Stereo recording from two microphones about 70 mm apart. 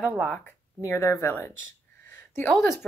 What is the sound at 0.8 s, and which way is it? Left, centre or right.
Speech, left.